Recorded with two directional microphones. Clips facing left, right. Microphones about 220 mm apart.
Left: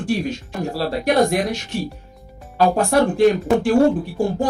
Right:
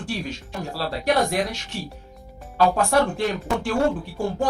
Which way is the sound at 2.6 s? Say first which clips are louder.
Left 3 dB; 40° left (ahead or behind).